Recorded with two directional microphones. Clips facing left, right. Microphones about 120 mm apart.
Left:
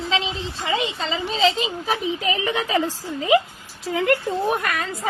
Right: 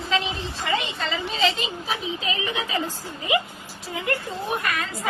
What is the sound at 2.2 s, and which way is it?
Speech, 70° left (ahead or behind).